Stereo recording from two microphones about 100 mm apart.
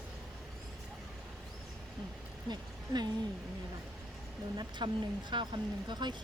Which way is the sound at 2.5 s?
45° right (ahead or behind).